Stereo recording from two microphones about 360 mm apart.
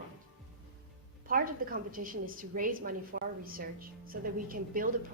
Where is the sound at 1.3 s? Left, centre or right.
Right.